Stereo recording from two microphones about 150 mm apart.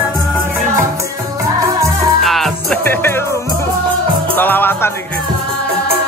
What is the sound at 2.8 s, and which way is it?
Music, 15° left (ahead or behind).